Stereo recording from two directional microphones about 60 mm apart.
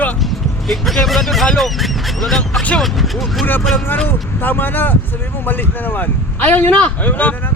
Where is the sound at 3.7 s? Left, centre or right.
Left.